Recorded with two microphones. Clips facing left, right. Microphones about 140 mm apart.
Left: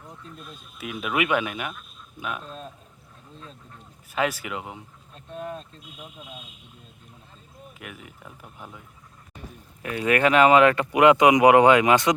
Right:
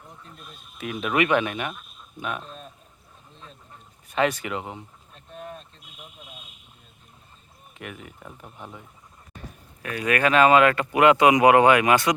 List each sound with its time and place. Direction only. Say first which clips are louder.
0.8 s speech: right 3 dB; 5° left (ahead or behind)
4.1 s speech: right 2 dB; 5° left (ahead or behind)
5.4 s a sound: left 5 dB; 40° left (ahead or behind)
7.7 s speech: right 4 dB; 5° left (ahead or behind)
9.8 s speech: left 2 dB; 25° left (ahead or behind)